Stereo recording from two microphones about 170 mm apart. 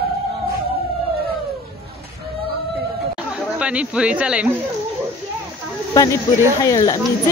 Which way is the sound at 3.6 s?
5° right (ahead or behind).